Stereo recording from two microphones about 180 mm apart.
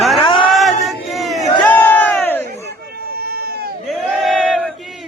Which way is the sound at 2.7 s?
60° right (ahead or behind).